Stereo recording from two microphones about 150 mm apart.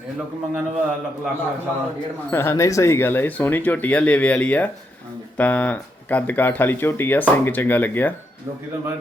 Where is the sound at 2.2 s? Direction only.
15° left (ahead or behind).